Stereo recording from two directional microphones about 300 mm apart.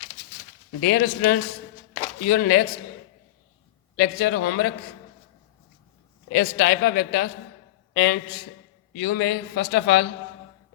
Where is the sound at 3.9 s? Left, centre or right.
Left.